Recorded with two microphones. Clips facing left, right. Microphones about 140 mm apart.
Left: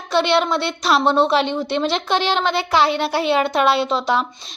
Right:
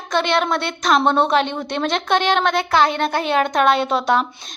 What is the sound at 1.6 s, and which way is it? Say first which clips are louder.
A woman's voice: even; 50° right (ahead or behind).